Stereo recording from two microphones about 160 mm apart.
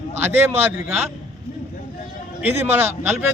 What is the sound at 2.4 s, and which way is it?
Speech, 10° right (ahead or behind).